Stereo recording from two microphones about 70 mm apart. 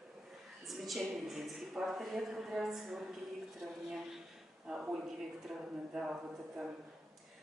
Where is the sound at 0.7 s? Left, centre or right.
Centre.